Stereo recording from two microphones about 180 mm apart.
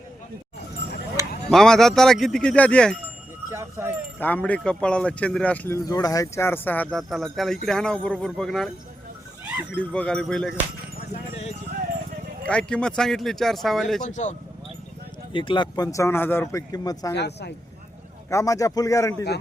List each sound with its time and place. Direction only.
1.5 s speech: 5° left (ahead or behind)
3.5 s speech: 15° right (ahead or behind)
4.2 s speech: 10° left (ahead or behind)
9.7 s speech: 5° left (ahead or behind)
11.1 s clip-clop: 40° left (ahead or behind)
12.5 s speech: 5° left (ahead or behind)
14.0 s speech: 40° left (ahead or behind)
15.3 s speech: 25° left (ahead or behind)
17.2 s speech: 70° left (ahead or behind)
18.3 s speech: 15° left (ahead or behind)